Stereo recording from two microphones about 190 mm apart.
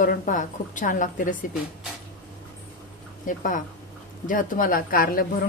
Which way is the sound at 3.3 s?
45° left (ahead or behind).